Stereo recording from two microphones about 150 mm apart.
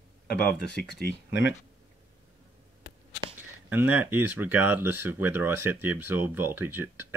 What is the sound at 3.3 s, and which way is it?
Speech, 15° right (ahead or behind).